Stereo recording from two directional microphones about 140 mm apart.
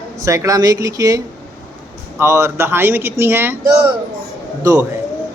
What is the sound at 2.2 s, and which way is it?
Speech, 20° right (ahead or behind).